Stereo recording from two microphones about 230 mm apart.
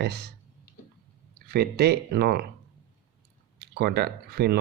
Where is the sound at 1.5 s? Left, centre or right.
Right.